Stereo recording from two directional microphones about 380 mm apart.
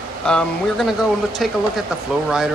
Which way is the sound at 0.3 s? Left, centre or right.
Centre.